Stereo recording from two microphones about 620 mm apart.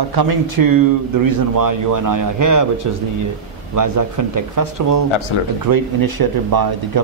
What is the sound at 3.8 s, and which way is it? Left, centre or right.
Speech, right.